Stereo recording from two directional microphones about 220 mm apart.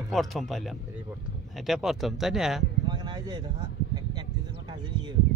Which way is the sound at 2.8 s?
20° right (ahead or behind).